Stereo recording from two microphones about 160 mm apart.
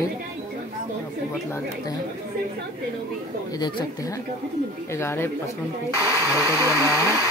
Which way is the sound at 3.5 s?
20° left (ahead or behind).